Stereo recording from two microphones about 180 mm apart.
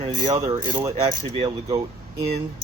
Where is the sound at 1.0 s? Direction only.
30° right (ahead or behind).